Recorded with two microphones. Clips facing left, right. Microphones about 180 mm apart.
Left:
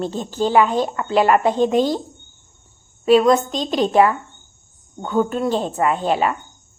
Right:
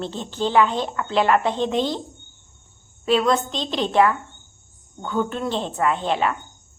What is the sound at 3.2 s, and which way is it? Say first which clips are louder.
Speech: left 5 dB; 45° left (ahead or behind).